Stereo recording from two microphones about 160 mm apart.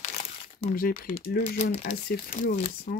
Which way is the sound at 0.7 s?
60° left (ahead or behind).